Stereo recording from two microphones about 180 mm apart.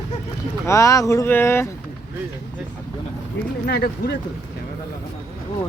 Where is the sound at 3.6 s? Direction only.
65° left (ahead or behind).